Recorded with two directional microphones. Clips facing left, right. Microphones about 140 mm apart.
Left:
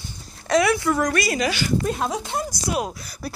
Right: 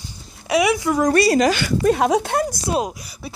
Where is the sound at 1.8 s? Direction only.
80° right; by 2.6 s 60° right (ahead or behind).